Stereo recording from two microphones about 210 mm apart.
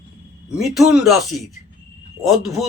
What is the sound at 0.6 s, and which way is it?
A man's voice, centre (ahead or behind).